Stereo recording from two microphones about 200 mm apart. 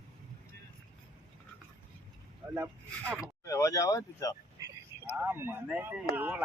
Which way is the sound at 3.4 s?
15° left (ahead or behind).